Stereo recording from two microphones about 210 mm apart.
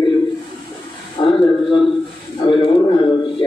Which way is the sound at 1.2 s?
25° left (ahead or behind).